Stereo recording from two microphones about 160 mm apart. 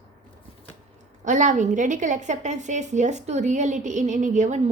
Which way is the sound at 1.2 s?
50° right (ahead or behind).